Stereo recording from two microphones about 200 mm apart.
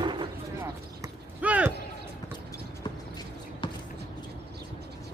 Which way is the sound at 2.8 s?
20° left (ahead or behind).